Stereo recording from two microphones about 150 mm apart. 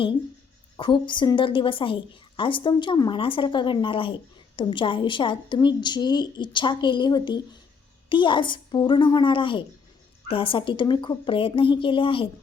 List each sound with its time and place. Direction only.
0.8 s a woman's voice: 30° left (ahead or behind)